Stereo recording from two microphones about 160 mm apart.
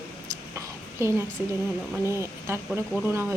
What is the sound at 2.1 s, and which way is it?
Speech, 15° right (ahead or behind).